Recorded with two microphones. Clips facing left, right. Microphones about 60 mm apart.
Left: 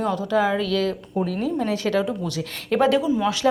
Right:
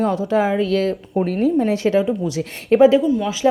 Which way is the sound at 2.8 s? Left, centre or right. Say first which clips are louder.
Right 7 dB; centre.